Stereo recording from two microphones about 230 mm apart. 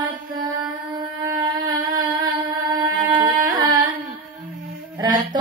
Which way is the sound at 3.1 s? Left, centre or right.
Centre.